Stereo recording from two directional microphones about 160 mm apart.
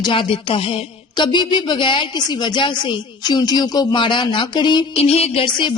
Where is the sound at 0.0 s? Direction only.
30° left (ahead or behind).